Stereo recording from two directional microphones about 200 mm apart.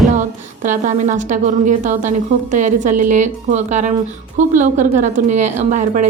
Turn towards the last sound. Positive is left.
turn(degrees=-35)  # may be behind; listen again after turning